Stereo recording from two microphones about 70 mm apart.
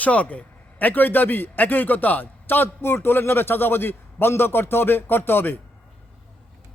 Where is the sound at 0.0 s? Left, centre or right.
Centre.